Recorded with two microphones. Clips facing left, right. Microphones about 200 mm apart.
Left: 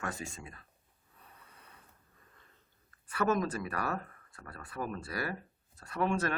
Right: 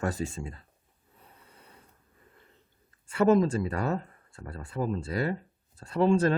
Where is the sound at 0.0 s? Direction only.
35° right (ahead or behind).